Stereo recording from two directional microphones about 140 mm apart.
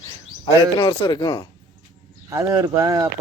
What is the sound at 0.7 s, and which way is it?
Speech, 30° left (ahead or behind).